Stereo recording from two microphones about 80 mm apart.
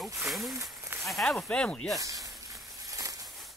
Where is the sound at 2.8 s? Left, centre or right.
Right.